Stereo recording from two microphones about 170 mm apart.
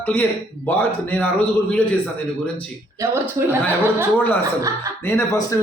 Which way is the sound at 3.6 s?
10° left (ahead or behind).